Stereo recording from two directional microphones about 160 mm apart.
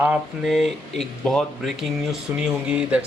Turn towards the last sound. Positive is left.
turn(degrees=-5)  # may be behind; listen again after turning